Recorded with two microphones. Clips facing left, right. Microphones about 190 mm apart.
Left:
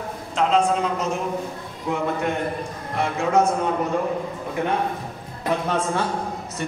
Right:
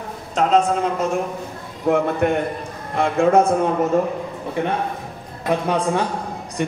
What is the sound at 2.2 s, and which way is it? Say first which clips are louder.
A man's voice: right 5 dB; 55° right (ahead or behind).